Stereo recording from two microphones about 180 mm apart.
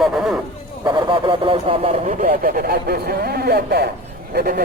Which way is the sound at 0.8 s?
25° right (ahead or behind).